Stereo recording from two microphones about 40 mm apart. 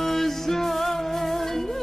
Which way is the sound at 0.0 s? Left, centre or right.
Centre.